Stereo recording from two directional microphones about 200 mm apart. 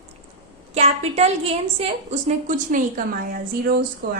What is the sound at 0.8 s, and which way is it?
A woman's voice, 30° right (ahead or behind).